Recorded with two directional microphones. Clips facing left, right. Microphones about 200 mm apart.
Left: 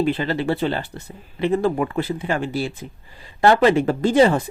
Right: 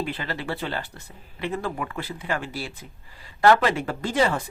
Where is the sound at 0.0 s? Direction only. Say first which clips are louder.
Left 9 dB; 25° left (ahead or behind).